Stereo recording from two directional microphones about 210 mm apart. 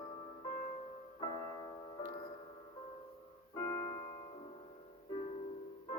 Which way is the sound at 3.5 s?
15° left (ahead or behind).